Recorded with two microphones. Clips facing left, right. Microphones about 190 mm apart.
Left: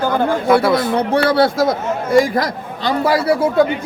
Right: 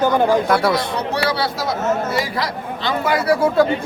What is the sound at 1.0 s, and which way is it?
A man's voice, 50° left (ahead or behind).